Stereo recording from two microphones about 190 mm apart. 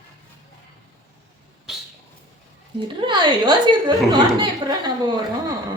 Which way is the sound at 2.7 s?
25° right (ahead or behind).